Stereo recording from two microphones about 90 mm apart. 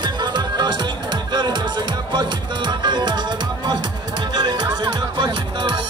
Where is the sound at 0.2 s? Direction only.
55° right (ahead or behind).